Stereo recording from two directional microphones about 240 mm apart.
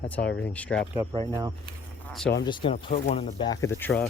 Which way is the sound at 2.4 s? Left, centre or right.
Centre.